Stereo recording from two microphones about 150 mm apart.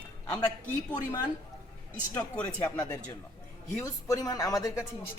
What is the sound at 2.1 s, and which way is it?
Speech, 10° left (ahead or behind).